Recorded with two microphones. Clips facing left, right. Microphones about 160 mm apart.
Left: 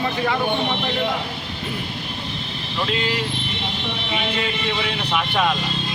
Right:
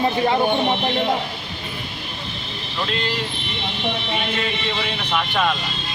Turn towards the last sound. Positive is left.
turn(degrees=5)  # may be behind; listen again after turning